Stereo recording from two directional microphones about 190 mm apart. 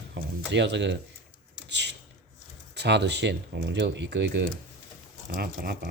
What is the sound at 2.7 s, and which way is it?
Speech, 65° right (ahead or behind).